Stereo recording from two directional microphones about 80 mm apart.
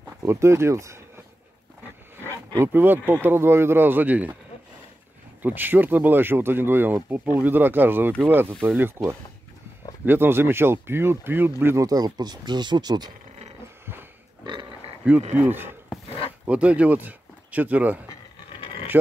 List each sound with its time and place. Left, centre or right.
0.2 s speech: right
2.6 s speech: right
5.4 s speech: right
11.7 s speech: right
14.4 s pig: right
15.0 s speech: right